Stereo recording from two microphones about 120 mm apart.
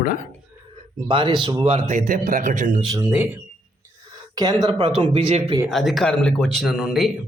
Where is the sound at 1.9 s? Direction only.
85° right.